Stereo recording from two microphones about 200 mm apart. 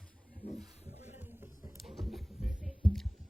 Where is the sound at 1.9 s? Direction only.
Centre (ahead or behind).